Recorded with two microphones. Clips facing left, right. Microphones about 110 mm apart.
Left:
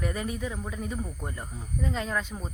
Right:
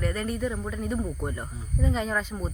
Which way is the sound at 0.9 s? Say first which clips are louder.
Right 6 dB; 15° right (ahead or behind).